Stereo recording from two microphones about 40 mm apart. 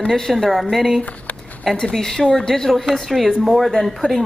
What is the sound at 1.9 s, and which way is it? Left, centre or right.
Speech, centre.